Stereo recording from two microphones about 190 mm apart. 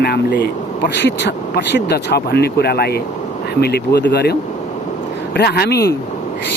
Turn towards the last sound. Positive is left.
turn(degrees=60)  # may be behind; listen again after turning